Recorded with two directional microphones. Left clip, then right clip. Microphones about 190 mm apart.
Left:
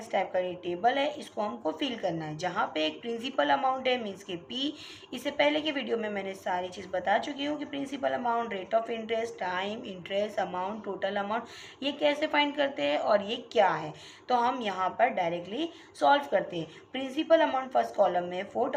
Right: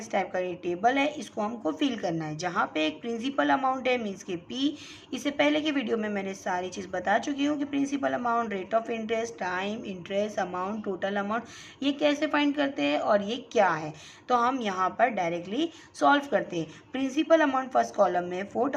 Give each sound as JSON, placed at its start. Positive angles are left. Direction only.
{"t": 0.1, "sound": "a woman's voice", "side_deg": -30}